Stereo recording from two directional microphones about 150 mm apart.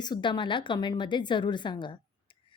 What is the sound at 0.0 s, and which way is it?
A woman's voice, 30° left (ahead or behind).